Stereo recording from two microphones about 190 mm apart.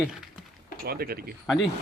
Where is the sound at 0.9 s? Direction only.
55° right (ahead or behind).